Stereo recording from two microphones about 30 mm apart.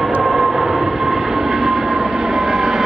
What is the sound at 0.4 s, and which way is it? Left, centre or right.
Vehicle, centre.